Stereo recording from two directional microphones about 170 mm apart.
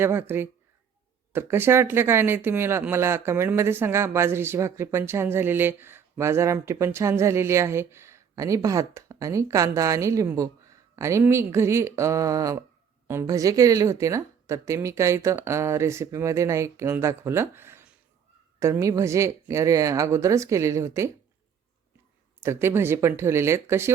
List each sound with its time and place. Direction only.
0.0 s speech: 15° right (ahead or behind)
22.4 s speech: 15° right (ahead or behind)